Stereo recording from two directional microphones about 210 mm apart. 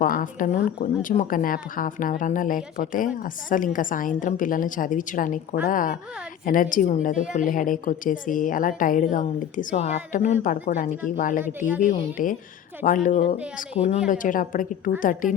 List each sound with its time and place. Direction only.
0.0 s a woman's voice: 40° left (ahead or behind)
11.4 s speech: 10° right (ahead or behind)
11.8 s a woman's voice: 40° left (ahead or behind)